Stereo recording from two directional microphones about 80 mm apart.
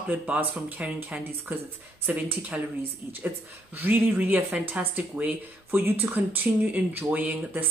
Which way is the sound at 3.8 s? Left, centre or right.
Right.